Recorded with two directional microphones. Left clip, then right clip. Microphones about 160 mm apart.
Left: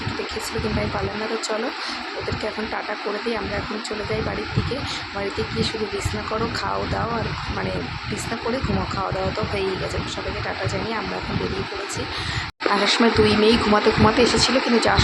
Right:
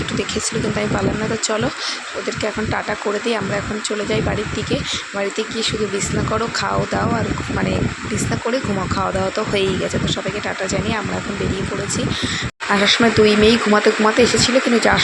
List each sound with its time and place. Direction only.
12.8 s speech: 20° right (ahead or behind)